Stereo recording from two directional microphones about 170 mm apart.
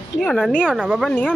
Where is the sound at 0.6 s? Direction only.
10° right (ahead or behind).